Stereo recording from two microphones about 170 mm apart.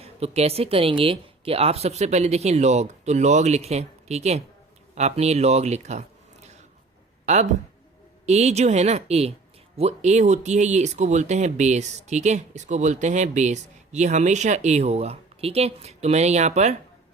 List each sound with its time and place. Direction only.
0.0 s speech: 35° right (ahead or behind)
8.3 s speech: 40° right (ahead or behind)